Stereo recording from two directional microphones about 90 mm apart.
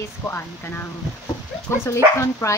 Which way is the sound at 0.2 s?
25° left (ahead or behind).